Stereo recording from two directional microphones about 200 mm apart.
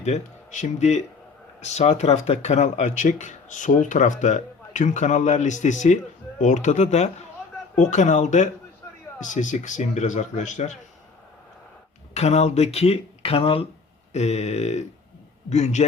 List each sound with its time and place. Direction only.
0.0 s speech: 35° left (ahead or behind)
12.1 s speech: 35° left (ahead or behind)